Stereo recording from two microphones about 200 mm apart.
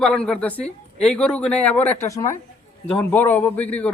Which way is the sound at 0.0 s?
5° left (ahead or behind).